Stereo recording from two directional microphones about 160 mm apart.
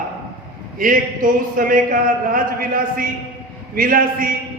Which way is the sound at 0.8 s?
60° right (ahead or behind).